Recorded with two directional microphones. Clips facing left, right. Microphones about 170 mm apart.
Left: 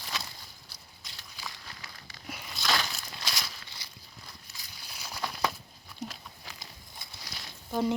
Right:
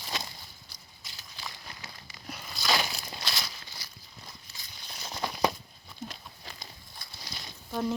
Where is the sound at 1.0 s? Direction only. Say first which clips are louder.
Right 1 dB; 5° right (ahead or behind).